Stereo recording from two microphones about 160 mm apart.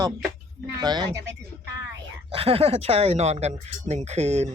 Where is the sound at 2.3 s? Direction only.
35° right (ahead or behind).